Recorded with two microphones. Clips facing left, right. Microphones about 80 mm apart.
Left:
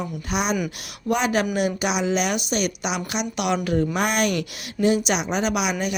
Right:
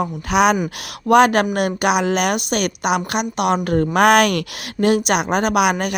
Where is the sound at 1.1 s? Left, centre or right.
Right.